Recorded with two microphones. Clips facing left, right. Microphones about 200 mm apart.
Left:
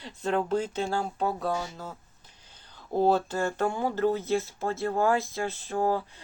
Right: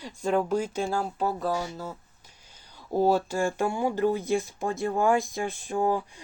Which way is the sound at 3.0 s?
10° right (ahead or behind).